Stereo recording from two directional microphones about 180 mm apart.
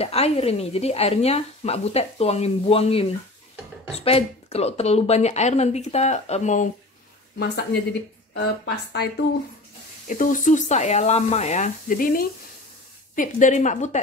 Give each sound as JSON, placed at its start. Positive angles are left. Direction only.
{"t": 0.0, "sound": "speech", "side_deg": 35}
{"t": 7.3, "sound": "speech", "side_deg": 60}
{"t": 10.0, "sound": "speech", "side_deg": 45}